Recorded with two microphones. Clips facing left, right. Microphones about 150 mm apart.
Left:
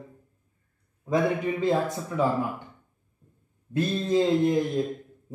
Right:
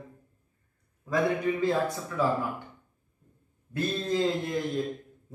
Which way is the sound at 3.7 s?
20° left (ahead or behind).